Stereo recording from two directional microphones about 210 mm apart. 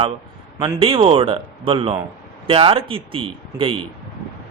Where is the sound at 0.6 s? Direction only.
20° right (ahead or behind).